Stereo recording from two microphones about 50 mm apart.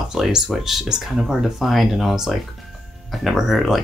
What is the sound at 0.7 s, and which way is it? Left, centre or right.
Speech, centre.